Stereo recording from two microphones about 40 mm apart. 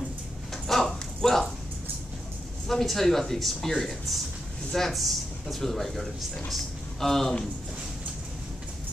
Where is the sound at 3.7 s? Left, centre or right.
Centre.